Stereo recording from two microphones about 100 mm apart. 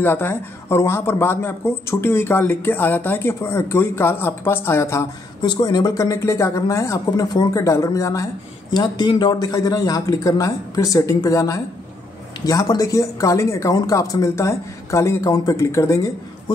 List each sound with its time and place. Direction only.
0.0 s speech: 20° left (ahead or behind)
5.4 s speech: 45° left (ahead or behind)
8.7 s speech: 45° left (ahead or behind); by 16.1 s 30° left (ahead or behind)